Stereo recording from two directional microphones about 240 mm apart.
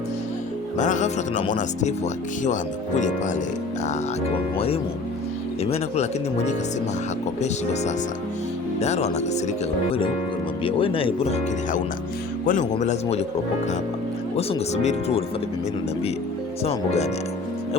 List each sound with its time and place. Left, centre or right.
0.8 s speech: left
4.5 s speech: left
10.6 s speech: left
14.3 s speech: left
16.6 s speech: left